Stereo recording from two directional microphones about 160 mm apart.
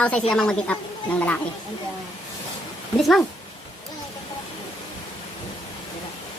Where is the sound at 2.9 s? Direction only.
Centre (ahead or behind).